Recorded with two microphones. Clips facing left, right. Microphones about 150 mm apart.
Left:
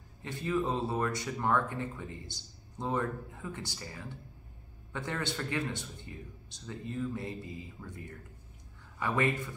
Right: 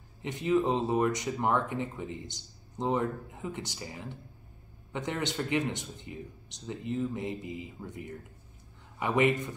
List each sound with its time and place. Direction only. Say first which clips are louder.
0.2 s speech: right 5 dB; 20° right (ahead or behind)